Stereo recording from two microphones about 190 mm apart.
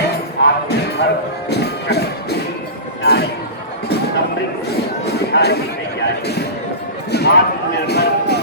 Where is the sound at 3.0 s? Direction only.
60° left (ahead or behind).